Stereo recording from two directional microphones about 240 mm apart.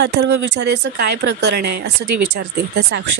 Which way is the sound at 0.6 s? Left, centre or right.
Right.